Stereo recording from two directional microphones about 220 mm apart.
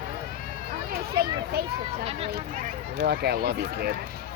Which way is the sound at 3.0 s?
45° right (ahead or behind).